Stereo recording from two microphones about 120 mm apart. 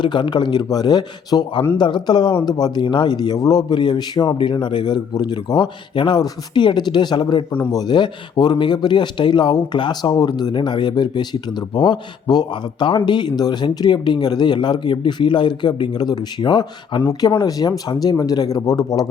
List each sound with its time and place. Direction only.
0.0 s speech: 40° left (ahead or behind)